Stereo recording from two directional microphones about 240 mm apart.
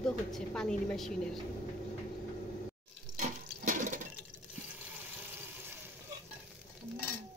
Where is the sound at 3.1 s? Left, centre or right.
Right.